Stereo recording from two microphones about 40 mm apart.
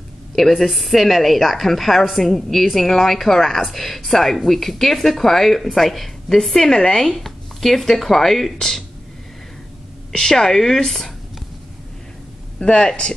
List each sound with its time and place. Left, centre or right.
0.4 s a woman's voice: centre
10.1 s speech: centre
12.6 s speech: left